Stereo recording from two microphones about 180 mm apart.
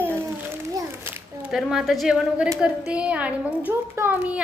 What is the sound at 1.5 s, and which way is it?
A child's voice, centre (ahead or behind).